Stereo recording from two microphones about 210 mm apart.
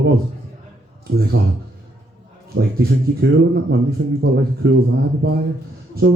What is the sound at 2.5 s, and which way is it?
A man's voice, 50° right (ahead or behind).